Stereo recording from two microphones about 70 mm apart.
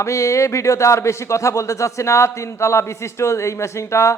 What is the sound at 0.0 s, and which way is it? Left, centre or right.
A man's voice, left.